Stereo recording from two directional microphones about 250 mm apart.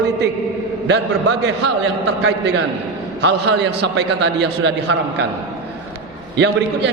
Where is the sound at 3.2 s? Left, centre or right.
Right.